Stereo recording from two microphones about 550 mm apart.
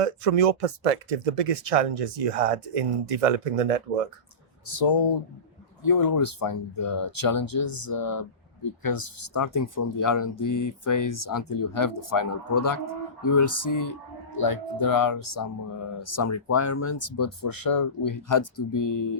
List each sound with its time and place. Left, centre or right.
0.0 s speech: right
4.6 s speech: left
5.8 s speech: left